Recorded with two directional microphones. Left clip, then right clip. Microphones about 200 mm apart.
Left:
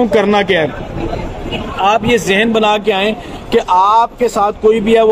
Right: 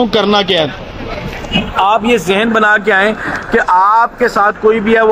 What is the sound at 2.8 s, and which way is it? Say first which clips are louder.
Speech: right 3 dB; 25° left (ahead or behind).